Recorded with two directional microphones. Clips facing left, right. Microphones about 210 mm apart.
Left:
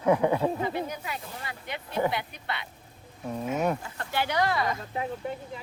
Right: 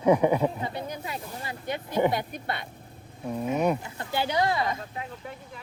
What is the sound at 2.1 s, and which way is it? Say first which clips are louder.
Speech: right 3 dB; 45° right (ahead or behind).